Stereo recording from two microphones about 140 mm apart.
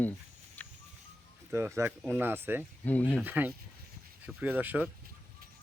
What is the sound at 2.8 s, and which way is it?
Speech, 10° left (ahead or behind).